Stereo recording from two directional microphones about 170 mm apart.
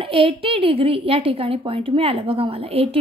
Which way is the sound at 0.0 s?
30° right (ahead or behind).